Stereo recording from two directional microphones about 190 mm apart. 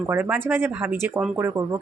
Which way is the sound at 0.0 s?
10° right (ahead or behind).